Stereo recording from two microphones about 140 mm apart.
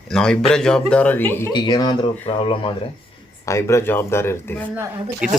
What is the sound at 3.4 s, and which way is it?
A man's voice, 20° left (ahead or behind).